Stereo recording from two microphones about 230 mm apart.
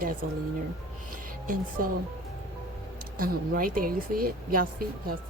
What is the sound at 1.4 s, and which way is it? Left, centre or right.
Speech, right.